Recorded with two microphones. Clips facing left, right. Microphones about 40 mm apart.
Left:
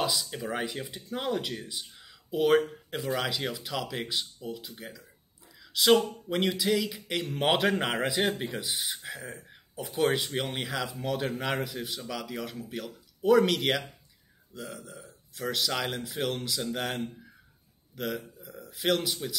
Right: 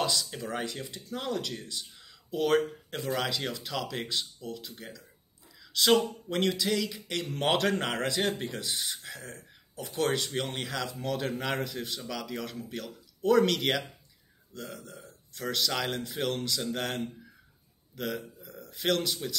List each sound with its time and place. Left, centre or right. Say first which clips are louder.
0.0 s a man's voice: even; centre